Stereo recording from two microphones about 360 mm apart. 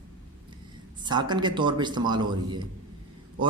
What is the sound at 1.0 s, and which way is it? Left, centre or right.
A man's voice, centre.